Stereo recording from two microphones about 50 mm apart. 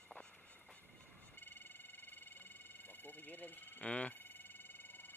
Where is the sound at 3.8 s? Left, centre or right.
Left.